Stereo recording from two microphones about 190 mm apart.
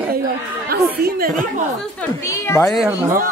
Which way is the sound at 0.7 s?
50° right (ahead or behind).